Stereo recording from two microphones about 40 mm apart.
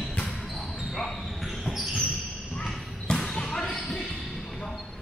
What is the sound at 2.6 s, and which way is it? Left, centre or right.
Basketball bounce, centre.